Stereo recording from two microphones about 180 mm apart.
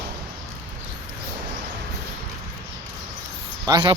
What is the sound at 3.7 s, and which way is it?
Speech, 20° right (ahead or behind).